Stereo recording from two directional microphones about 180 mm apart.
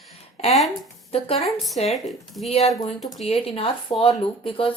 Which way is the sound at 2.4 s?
35° left (ahead or behind).